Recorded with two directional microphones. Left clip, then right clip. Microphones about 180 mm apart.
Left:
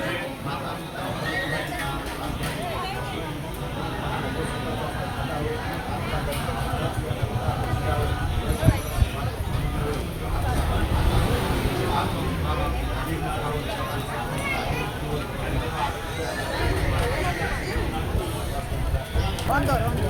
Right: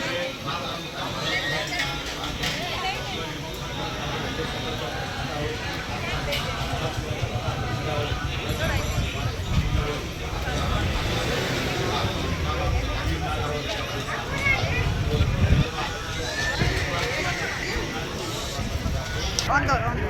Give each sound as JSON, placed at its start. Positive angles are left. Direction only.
{"t": 19.5, "sound": "clip-clop", "side_deg": 40}